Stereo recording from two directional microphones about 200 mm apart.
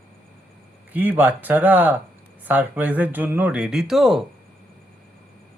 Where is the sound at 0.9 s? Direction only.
10° right (ahead or behind).